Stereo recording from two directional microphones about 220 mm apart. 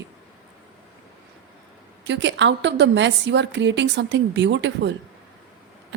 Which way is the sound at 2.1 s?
55° right (ahead or behind).